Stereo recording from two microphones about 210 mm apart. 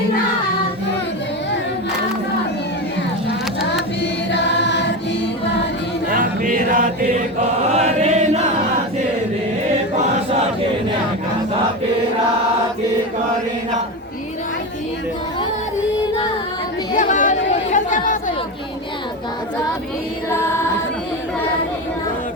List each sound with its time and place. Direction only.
4.0 s choir: 55° left (ahead or behind)
6.1 s music: 40° right (ahead or behind)
7.8 s chant: 30° right (ahead or behind)
16.9 s chatter: 35° left (ahead or behind)